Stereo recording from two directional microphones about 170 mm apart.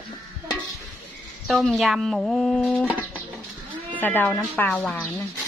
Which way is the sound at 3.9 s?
10° left (ahead or behind).